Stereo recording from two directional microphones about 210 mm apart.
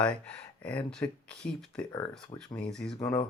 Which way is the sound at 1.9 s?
20° left (ahead or behind).